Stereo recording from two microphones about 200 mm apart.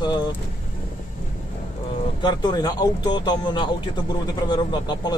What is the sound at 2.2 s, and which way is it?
Speech, 20° left (ahead or behind).